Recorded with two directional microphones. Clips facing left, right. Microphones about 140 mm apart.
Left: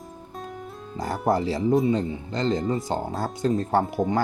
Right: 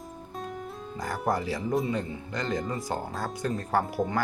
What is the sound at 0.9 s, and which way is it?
Speech, 30° left (ahead or behind).